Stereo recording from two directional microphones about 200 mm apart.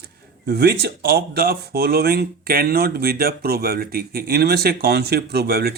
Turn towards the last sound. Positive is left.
turn(degrees=-50)  # may be behind; listen again after turning